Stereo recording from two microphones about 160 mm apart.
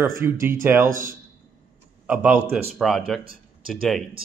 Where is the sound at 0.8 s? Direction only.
60° right (ahead or behind).